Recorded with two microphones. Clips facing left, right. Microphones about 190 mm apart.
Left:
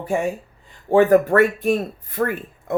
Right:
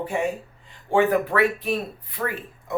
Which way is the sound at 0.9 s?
40° left (ahead or behind).